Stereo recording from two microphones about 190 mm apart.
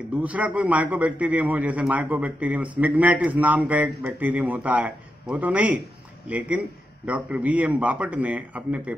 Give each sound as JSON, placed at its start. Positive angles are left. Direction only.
{"t": 0.2, "sound": "a man's voice", "side_deg": -5}